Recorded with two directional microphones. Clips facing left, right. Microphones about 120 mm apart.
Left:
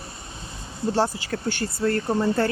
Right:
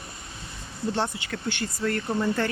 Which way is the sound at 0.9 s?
35° left (ahead or behind).